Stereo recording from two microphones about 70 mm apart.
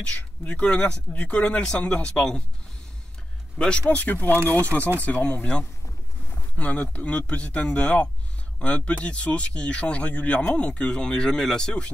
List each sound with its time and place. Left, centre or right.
0.0 s speech: centre
3.5 s speech: centre